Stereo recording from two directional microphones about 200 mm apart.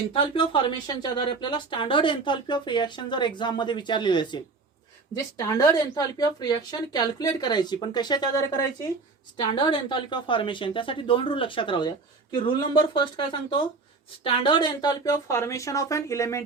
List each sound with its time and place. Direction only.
0.1 s speech: 25° left (ahead or behind)
9.6 s speech: 25° left (ahead or behind)